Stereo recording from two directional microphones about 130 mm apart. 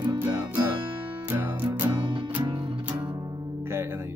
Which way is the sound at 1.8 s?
35° right (ahead or behind).